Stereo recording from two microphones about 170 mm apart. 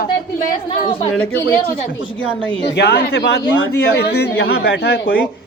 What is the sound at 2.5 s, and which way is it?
Speech, 85° left.